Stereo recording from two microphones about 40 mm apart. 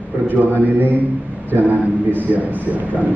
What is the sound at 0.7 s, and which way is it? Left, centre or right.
A man's voice, right.